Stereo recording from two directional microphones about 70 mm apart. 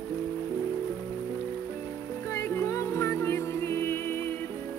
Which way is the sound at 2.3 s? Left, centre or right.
Left.